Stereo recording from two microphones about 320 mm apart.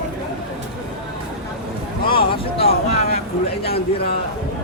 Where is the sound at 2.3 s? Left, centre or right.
Centre.